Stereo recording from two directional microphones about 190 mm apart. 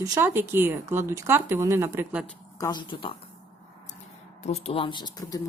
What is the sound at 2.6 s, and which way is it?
Speech, 25° left (ahead or behind).